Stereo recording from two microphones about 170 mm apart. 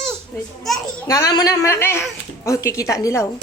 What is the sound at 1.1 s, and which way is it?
A man's voice, 20° left (ahead or behind).